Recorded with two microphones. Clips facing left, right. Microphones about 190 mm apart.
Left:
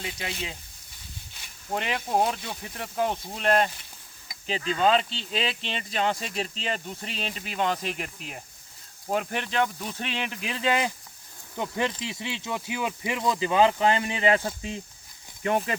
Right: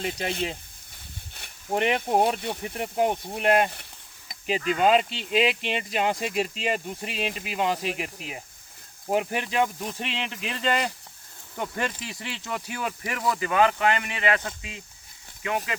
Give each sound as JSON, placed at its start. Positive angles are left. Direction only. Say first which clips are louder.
{"t": 0.0, "sound": "speech", "louder": "right 6 dB", "side_deg": -50}
{"t": 1.7, "sound": "speech", "louder": "right 4 dB", "side_deg": -20}